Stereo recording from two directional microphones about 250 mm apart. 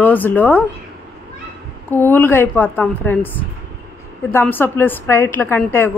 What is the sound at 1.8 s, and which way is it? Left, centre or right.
Speech, centre.